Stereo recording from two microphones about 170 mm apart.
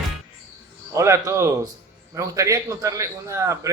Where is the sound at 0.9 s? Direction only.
15° right (ahead or behind).